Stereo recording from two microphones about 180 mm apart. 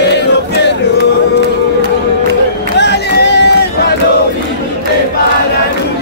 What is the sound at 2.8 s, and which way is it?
Music, 70° left (ahead or behind).